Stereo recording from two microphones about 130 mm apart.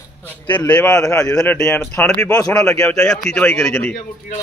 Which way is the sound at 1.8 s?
15° left (ahead or behind).